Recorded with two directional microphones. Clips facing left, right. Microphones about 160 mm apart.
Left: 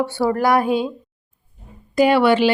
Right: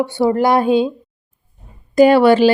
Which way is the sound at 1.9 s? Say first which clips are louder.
Right 5 dB; 40° right (ahead or behind).